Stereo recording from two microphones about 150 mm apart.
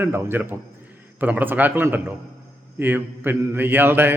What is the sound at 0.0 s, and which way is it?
Mantra, 15° right (ahead or behind).